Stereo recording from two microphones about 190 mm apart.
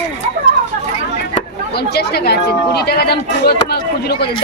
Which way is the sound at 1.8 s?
60° left (ahead or behind).